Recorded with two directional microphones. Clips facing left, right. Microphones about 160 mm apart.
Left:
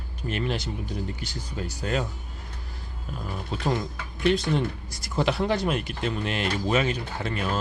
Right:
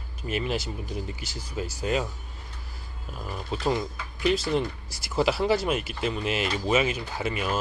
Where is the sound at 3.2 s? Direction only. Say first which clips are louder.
Right 1 dB; centre (ahead or behind).